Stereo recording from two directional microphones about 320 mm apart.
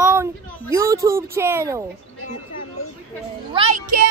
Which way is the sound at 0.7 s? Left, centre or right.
Centre.